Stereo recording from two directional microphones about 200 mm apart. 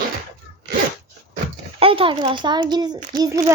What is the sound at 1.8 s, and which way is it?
Speech, 25° right (ahead or behind).